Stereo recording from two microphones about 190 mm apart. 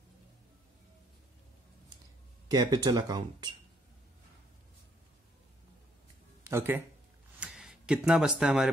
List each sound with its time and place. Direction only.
2.4 s speech: 20° right (ahead or behind)
6.5 s speech: 10° right (ahead or behind)
7.3 s a sound: centre (ahead or behind)